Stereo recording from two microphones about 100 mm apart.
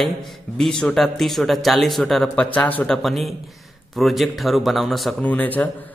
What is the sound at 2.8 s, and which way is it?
Speech, centre (ahead or behind).